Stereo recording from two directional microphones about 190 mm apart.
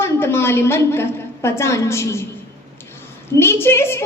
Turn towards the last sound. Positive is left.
turn(degrees=15)  # may be behind; listen again after turning